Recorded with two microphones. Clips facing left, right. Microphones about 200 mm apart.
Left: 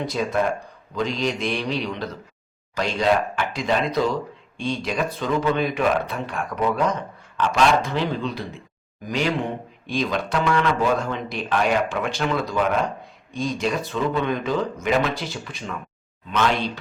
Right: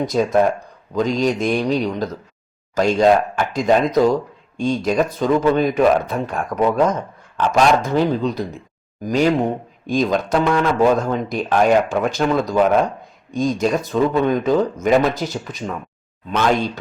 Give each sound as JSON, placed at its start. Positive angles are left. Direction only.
{"t": 0.0, "sound": "speech", "side_deg": -45}